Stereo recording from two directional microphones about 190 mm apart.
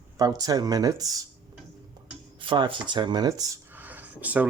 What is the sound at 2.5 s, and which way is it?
Speech, 25° right (ahead or behind).